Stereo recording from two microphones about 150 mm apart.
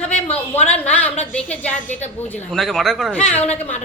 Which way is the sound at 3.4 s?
45° left (ahead or behind).